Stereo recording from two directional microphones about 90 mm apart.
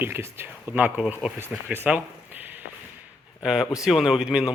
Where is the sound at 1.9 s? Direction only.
20° right (ahead or behind).